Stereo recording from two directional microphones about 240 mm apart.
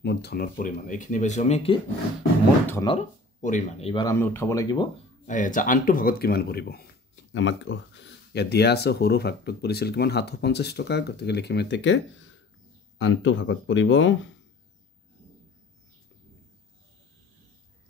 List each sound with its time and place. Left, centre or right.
0.0 s speech: left
3.9 s speech: centre
5.2 s speech: left
13.0 s speech: left